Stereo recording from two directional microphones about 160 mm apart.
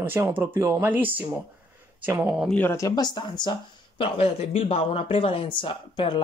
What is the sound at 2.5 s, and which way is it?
Speech, 15° left (ahead or behind).